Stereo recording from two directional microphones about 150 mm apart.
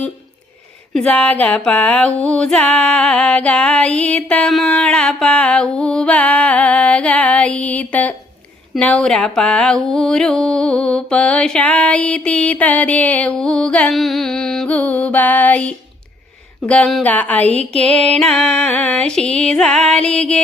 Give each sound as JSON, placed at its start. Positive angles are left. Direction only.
{"t": 0.9, "sound": "a sound", "side_deg": 10}
{"t": 17.6, "sound": "music", "side_deg": -45}
{"t": 18.2, "sound": "music", "side_deg": 5}